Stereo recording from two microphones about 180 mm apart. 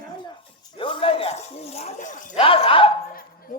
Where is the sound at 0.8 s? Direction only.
30° left (ahead or behind).